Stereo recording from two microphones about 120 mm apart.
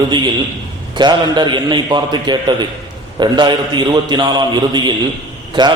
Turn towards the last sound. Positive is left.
turn(degrees=-40)  # may be behind; listen again after turning